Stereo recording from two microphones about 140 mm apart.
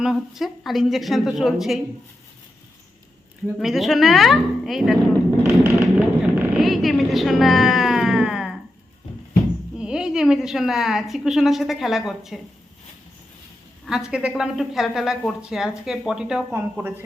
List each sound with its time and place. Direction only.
0.0 s a woman's voice: centre (ahead or behind)
3.6 s a woman's voice: centre (ahead or behind)
5.4 s a sound: 15° right (ahead or behind)
6.6 s a sound: centre (ahead or behind)
9.7 s a woman's voice: 5° right (ahead or behind)
13.8 s a woman's voice: 5° right (ahead or behind)